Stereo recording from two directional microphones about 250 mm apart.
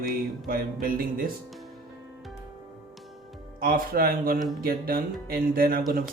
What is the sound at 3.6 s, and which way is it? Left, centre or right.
Speech, right.